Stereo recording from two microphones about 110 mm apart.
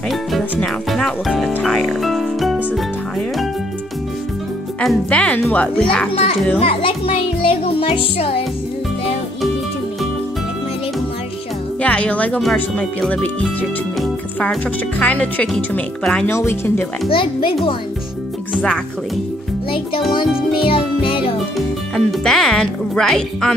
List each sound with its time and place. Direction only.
0.1 s speech: centre (ahead or behind)
1.6 s music: centre (ahead or behind)
5.1 s speech: 10° left (ahead or behind)
6.6 s music: 55° left (ahead or behind)
11.8 s speech: 10° left (ahead or behind)
14.0 s music: centre (ahead or behind)
15.0 s speech: 10° left (ahead or behind)
16.3 s speech: 20° left (ahead or behind)
17.1 s a child's voice: 50° left (ahead or behind)
20.6 s music: 50° left (ahead or behind)
21.5 s speech: 5° left (ahead or behind)